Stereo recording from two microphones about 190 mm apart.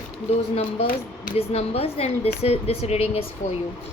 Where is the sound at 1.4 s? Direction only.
30° left (ahead or behind).